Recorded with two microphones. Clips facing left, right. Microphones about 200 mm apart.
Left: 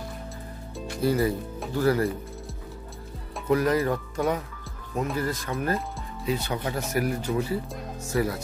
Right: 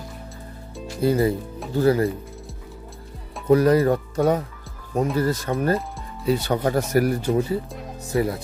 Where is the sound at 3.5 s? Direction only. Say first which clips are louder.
Right 6 dB; 35° right (ahead or behind).